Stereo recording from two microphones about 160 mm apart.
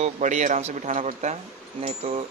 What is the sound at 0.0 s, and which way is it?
Speech, 45° right (ahead or behind).